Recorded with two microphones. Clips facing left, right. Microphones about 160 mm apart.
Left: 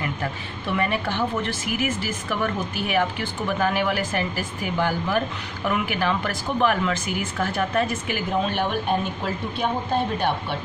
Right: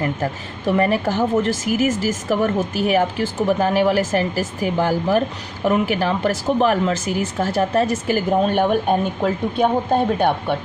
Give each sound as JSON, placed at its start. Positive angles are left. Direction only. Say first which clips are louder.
{"t": 0.0, "sound": "speech", "louder": "right 6 dB", "side_deg": -40}